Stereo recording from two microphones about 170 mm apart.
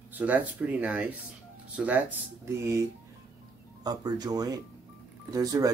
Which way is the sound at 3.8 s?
25° right (ahead or behind).